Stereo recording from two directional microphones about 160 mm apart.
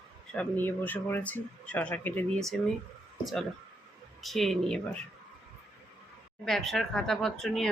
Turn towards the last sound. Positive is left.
turn(degrees=0)  # may be behind; listen again after turning